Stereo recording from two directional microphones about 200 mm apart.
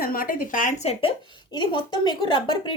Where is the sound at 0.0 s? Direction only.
45° left (ahead or behind).